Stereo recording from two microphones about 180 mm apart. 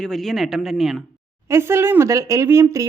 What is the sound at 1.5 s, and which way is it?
A woman's voice, 15° right (ahead or behind).